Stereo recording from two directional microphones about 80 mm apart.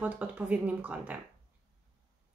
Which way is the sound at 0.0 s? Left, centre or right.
Centre.